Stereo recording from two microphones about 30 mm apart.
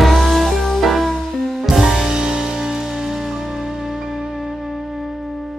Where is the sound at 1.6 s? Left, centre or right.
Centre.